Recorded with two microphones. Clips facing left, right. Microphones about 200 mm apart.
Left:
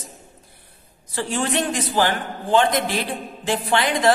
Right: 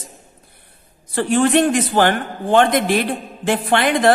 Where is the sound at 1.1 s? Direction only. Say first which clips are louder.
Right 8 dB; 55° right (ahead or behind).